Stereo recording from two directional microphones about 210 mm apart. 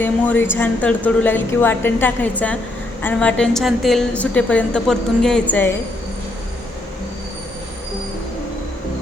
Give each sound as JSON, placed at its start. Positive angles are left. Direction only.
{"t": 0.0, "sound": "a woman's voice", "side_deg": 10}